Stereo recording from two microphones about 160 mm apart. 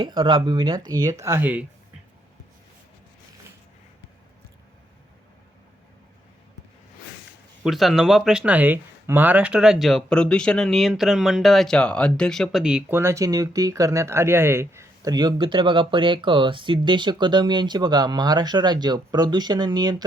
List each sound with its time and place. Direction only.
0.0 s speech: 25° right (ahead or behind); by 1.6 s 10° right (ahead or behind)
7.6 s speech: centre (ahead or behind); by 20.1 s 25° right (ahead or behind)